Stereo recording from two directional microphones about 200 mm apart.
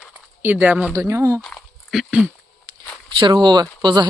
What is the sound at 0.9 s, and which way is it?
Speech, 15° right (ahead or behind).